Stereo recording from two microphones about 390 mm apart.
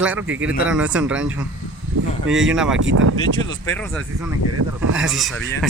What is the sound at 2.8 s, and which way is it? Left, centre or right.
Speech, right.